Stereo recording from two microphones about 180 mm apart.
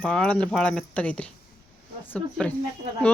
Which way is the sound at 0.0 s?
5° left (ahead or behind).